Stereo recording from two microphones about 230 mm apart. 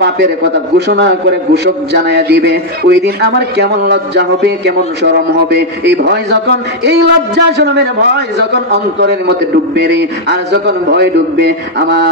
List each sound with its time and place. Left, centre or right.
0.7 s a man's voice: right